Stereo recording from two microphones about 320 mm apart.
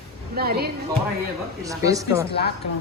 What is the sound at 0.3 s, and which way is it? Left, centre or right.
Speech, right.